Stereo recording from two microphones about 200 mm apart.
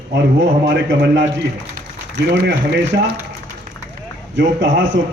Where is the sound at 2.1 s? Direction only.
60° right (ahead or behind).